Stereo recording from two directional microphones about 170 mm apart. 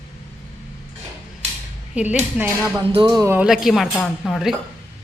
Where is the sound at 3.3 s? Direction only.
5° right (ahead or behind).